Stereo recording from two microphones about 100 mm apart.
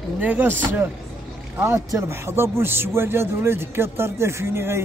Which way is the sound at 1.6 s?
30° right (ahead or behind).